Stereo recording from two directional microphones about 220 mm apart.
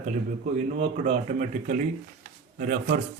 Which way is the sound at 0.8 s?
30° right (ahead or behind).